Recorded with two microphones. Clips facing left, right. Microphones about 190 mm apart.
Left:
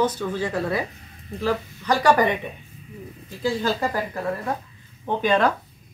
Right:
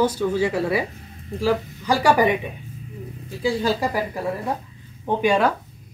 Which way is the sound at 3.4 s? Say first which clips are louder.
Right 2 dB; 10° right (ahead or behind).